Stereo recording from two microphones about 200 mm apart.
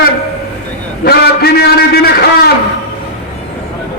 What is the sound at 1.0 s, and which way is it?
A man's voice, 50° left (ahead or behind).